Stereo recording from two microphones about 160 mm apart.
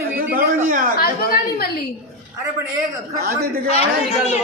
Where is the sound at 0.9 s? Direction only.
70° left (ahead or behind).